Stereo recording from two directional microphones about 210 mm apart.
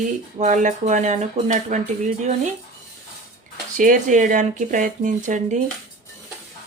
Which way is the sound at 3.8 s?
35° right (ahead or behind).